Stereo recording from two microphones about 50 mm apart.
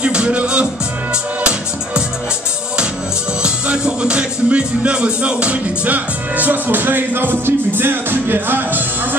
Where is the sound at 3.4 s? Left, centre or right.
Centre; by 9.2 s right.